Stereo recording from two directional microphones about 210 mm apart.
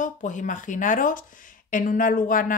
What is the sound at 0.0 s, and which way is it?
Speech, 35° left (ahead or behind).